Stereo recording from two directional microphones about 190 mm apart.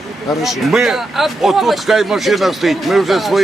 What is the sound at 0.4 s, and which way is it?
Speech, centre (ahead or behind).